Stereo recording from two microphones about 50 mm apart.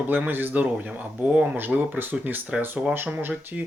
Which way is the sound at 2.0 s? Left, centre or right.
Right.